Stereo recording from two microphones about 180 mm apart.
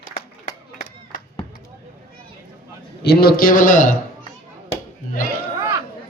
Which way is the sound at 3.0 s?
55° left (ahead or behind).